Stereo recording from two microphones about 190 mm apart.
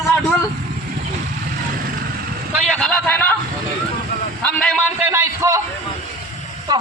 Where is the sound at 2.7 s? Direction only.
5° left (ahead or behind).